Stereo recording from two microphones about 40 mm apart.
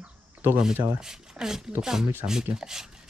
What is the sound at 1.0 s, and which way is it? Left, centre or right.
Speech, centre.